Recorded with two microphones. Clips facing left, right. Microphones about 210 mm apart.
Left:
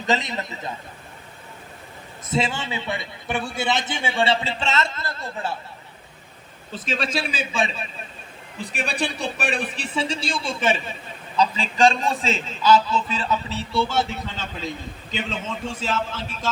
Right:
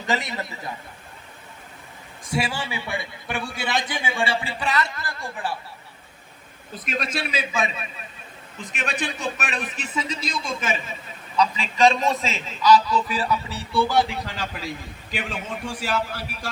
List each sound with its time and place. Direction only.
0.0 s a man's voice: 20° left (ahead or behind)
2.3 s a man's voice: 20° left (ahead or behind)
7.3 s a man's voice: 30° left (ahead or behind)